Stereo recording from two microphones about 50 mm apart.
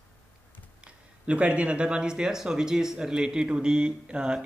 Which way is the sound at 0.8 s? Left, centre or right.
Right.